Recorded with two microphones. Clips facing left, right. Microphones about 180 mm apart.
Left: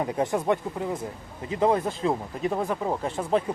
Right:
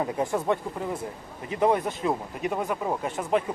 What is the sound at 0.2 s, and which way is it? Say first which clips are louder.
Speech: left 3 dB; 20° left (ahead or behind).